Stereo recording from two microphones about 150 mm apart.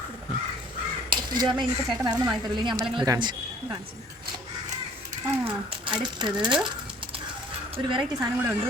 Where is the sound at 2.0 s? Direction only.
25° right (ahead or behind).